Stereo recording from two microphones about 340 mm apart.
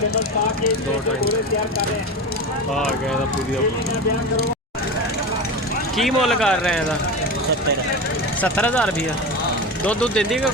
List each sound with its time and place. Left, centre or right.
0.1 s speech: left
6.0 s speech: centre
8.4 s speech: centre